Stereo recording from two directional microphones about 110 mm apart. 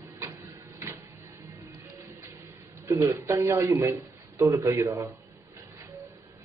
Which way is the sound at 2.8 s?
30° right (ahead or behind).